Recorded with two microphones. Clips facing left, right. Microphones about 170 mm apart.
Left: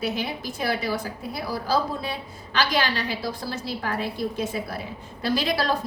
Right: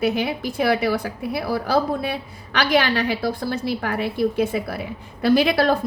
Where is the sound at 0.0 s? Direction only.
60° right (ahead or behind).